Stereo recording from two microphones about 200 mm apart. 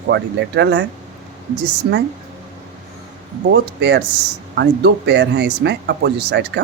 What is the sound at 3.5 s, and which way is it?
Speech, 60° right (ahead or behind).